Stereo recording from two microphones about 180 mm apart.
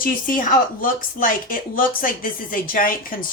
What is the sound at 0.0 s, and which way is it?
A woman's voice, 50° left (ahead or behind).